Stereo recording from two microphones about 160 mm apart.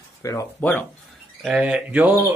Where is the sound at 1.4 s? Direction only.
5° right (ahead or behind).